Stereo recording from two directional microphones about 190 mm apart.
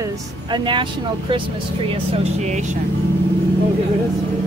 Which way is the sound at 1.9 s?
35° right (ahead or behind).